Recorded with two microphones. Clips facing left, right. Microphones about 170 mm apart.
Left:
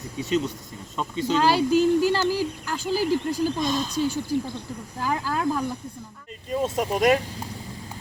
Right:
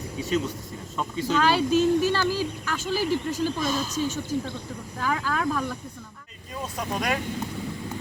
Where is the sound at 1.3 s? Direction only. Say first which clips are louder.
Left 2 dB; 15° left (ahead or behind).